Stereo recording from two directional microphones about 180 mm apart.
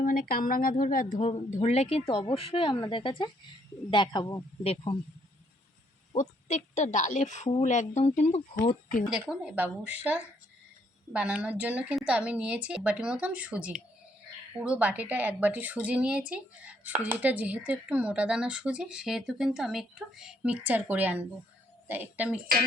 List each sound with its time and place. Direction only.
0.0 s a woman's voice: 50° left (ahead or behind)
1.5 s speech: 40° left (ahead or behind)
2.0 s speech: 25° left (ahead or behind)
4.6 s speech: 30° left (ahead or behind)
6.1 s a woman's voice: 45° left (ahead or behind)
9.0 s a woman's voice: 5° right (ahead or behind)